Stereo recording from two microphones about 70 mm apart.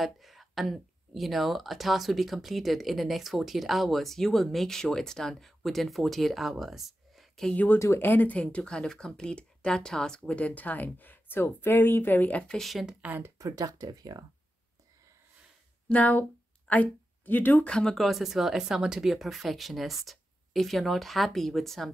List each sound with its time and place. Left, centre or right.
0.0 s speech: centre
7.5 s speech: left
12.4 s speech: centre
12.8 s speech: right
13.4 s speech: right
15.9 s speech: left
17.6 s speech: centre
17.9 s speech: centre